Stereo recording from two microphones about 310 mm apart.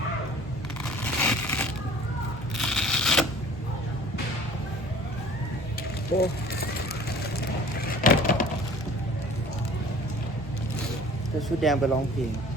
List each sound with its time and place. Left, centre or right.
1.0 s crushing: centre
2.6 s a sound: centre
6.1 s speech: left
7.9 s wood: left
11.4 s speech: centre